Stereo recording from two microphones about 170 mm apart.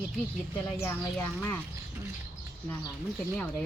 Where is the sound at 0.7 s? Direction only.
15° left (ahead or behind).